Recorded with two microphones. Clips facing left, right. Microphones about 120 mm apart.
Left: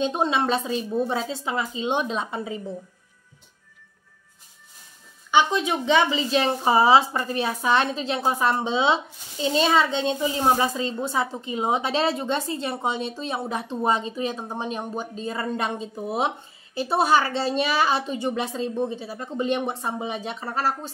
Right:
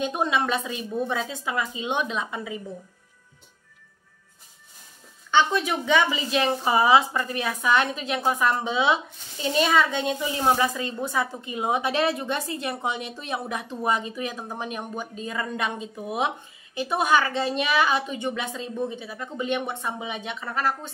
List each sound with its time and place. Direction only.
0.0 s speech: 30° left (ahead or behind)
5.3 s speech: 15° left (ahead or behind); by 20.9 s 35° left (ahead or behind)